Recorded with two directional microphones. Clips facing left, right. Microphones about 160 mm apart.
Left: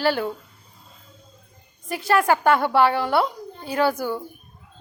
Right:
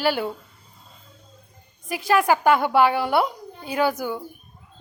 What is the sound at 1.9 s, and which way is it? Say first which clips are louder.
A woman's voice: even; 5° right (ahead or behind).